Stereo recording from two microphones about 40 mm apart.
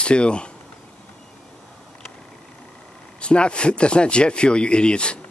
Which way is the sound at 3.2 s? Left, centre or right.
Left.